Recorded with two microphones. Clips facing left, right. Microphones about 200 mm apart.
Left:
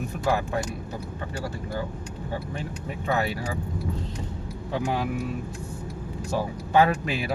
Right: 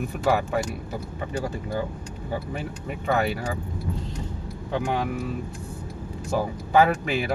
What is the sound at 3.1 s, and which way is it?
Speech, centre (ahead or behind).